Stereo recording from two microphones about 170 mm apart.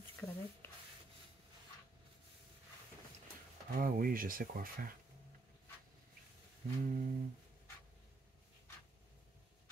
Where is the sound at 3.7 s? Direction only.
55° right (ahead or behind).